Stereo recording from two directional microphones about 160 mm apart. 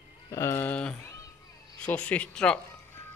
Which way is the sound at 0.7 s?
5° left (ahead or behind).